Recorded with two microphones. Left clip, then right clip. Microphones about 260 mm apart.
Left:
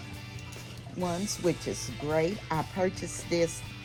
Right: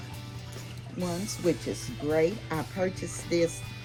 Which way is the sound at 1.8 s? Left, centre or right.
Left.